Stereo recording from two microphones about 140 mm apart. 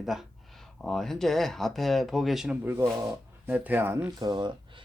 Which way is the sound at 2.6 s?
15° right (ahead or behind).